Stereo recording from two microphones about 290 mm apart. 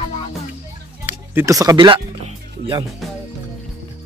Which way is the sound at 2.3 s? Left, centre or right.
Centre.